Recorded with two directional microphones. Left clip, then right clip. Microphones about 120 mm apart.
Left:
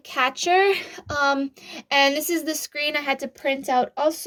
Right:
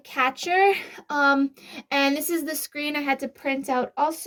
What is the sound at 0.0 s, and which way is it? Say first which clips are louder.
Speech: left 2 dB; 55° left (ahead or behind).